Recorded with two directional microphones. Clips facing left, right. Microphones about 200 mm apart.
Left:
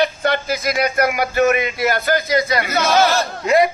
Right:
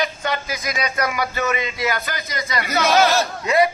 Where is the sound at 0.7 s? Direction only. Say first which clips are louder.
Left 4 dB; 55° left (ahead or behind).